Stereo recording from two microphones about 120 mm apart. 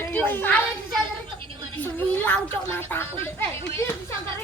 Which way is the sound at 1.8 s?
15° left (ahead or behind).